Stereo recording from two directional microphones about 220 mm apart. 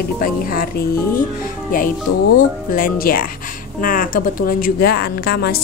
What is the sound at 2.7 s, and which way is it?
A woman's voice, 40° left (ahead or behind).